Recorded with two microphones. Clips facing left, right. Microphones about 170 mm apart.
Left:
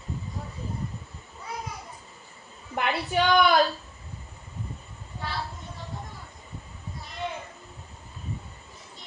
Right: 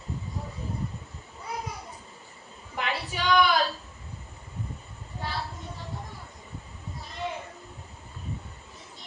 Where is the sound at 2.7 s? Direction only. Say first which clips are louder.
Left 6 dB; 55° left (ahead or behind).